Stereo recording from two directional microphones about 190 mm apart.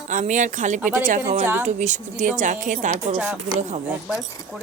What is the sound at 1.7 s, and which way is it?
Speech, 40° right (ahead or behind).